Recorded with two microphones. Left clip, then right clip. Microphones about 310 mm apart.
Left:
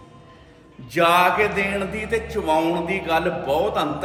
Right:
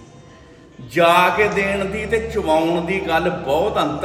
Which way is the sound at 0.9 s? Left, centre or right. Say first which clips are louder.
Right 3 dB; centre.